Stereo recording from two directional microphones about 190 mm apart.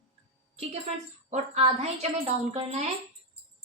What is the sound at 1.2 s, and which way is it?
A woman's voice, 35° right (ahead or behind).